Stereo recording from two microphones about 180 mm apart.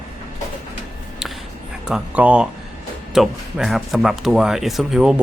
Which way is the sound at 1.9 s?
5° right (ahead or behind).